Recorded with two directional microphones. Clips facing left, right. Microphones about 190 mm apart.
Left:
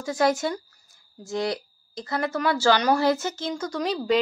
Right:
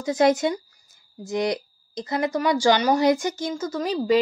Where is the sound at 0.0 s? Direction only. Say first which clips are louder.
Right 4 dB; 20° right (ahead or behind).